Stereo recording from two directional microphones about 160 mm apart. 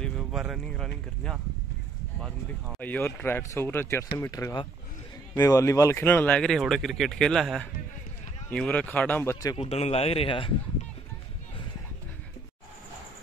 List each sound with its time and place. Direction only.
0.2 s speech: centre (ahead or behind)
2.8 s speech: 10° left (ahead or behind)
9.6 s speech: 40° left (ahead or behind)